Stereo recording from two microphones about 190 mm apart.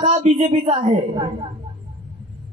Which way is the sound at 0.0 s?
40° right (ahead or behind).